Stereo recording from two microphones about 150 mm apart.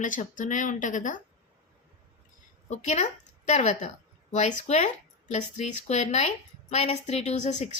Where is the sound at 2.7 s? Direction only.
50° left (ahead or behind).